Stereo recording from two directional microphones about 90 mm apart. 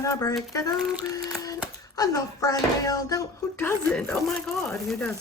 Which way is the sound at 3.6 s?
20° left (ahead or behind).